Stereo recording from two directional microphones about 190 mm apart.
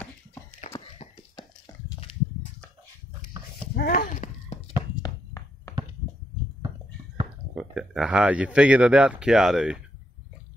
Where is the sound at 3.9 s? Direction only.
45° left (ahead or behind).